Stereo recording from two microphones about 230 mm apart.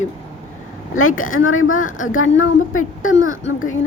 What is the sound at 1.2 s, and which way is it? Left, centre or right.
Speech, left.